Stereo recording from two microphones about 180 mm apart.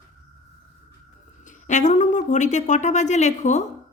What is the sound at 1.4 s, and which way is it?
Speech, 45° left (ahead or behind).